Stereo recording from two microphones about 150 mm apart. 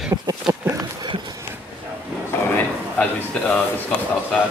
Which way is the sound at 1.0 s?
30° right (ahead or behind).